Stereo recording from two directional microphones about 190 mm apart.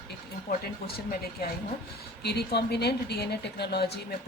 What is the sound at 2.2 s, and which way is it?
Speech, 60° left (ahead or behind).